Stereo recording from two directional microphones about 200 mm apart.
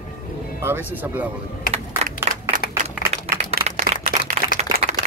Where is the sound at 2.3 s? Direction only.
35° right (ahead or behind).